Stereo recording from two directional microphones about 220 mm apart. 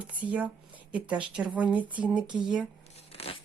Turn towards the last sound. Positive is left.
turn(degrees=25)  # may be behind; listen again after turning